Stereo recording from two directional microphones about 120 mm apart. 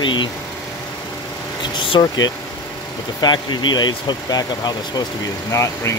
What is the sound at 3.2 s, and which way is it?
Speech, 40° left (ahead or behind).